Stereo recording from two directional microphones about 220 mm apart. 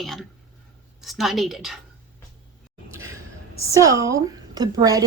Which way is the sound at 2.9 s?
15° right (ahead or behind).